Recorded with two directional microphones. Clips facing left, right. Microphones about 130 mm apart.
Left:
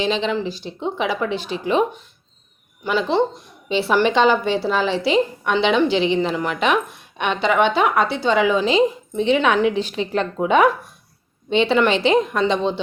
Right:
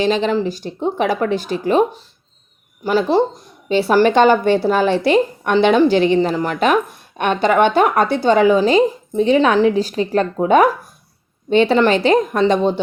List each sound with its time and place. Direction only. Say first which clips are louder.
0.0 s a woman's voice: right 4 dB; 45° right (ahead or behind)
6.1 s a woman's voice: right 4 dB; 35° right (ahead or behind)